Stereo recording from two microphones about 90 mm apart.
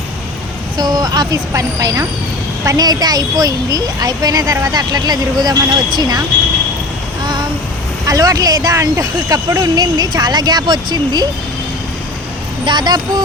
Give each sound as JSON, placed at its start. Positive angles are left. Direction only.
{"t": 0.8, "sound": "speech", "side_deg": -45}
{"t": 8.0, "sound": "speech", "side_deg": -40}
{"t": 12.6, "sound": "speech", "side_deg": -55}